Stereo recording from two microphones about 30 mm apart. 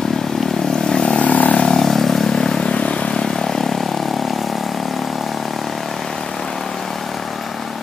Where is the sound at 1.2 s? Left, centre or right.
Left.